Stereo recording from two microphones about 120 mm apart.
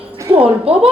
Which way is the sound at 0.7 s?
55° right (ahead or behind).